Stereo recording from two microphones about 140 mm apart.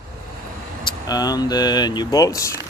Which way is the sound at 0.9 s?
30° left (ahead or behind).